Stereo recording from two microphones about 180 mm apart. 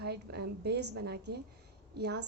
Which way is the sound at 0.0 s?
65° right (ahead or behind).